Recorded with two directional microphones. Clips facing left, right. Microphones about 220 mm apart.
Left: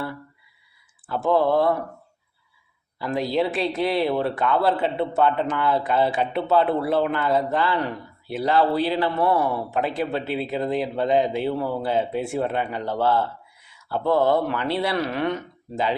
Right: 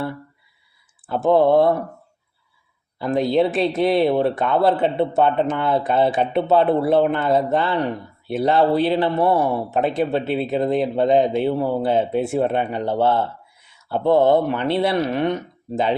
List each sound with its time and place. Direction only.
1.0 s a man's voice: 20° right (ahead or behind)
3.0 s a man's voice: 20° right (ahead or behind)